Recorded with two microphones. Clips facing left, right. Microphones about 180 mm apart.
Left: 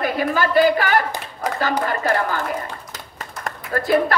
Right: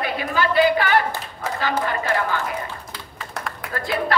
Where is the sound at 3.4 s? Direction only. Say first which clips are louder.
Left 7 dB; 45° left (ahead or behind).